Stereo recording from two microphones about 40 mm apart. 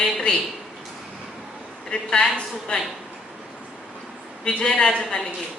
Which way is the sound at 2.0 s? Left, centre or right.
Centre.